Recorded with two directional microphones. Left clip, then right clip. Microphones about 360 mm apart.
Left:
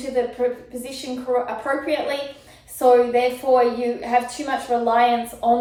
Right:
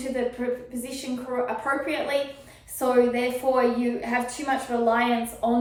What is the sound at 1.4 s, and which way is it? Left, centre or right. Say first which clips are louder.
Speech: left 3 dB; centre.